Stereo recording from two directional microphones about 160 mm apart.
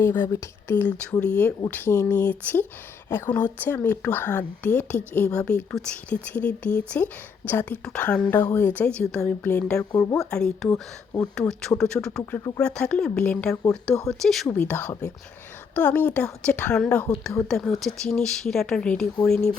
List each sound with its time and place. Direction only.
0.0 s speech: 15° left (ahead or behind)
9.9 s speech: 20° left (ahead or behind)
10.2 s speech: 5° left (ahead or behind)
12.2 s speech: 20° left (ahead or behind)
12.5 s speech: 5° left (ahead or behind)